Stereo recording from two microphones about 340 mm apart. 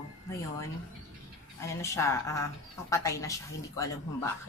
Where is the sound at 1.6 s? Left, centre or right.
Centre.